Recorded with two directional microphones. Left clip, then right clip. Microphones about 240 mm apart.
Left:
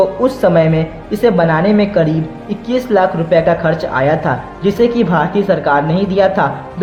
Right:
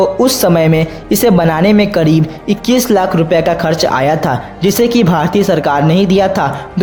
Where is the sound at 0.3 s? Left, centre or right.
Right.